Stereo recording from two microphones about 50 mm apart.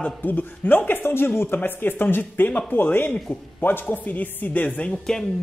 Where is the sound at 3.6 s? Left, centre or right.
Left.